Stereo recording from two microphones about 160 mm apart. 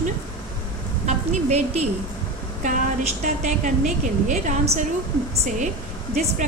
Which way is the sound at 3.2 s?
50° right (ahead or behind).